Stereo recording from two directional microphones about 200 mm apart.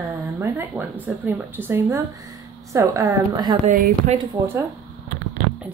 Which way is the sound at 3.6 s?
35° right (ahead or behind).